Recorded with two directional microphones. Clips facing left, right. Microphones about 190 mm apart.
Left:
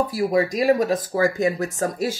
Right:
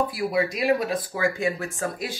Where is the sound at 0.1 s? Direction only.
40° left (ahead or behind).